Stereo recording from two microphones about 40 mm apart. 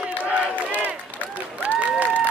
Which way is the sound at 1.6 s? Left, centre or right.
Right.